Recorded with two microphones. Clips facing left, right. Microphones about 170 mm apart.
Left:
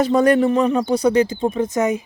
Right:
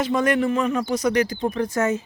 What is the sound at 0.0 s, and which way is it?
Speech, 35° left (ahead or behind).